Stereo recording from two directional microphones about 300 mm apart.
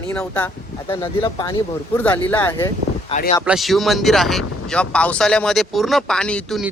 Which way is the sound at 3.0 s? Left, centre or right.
Left.